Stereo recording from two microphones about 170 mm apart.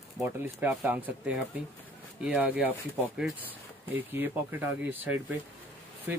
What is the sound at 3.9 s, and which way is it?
Speech, 10° right (ahead or behind).